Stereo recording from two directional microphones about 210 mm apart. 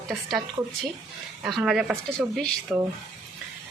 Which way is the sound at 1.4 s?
Centre (ahead or behind).